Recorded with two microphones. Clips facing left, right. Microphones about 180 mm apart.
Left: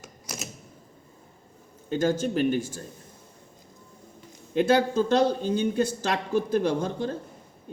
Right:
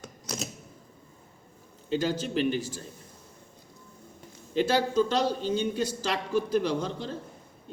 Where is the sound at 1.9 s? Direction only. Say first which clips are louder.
Left 3 dB; 50° left (ahead or behind).